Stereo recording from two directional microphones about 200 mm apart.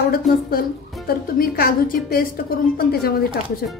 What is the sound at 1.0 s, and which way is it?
A woman's voice, 50° left (ahead or behind).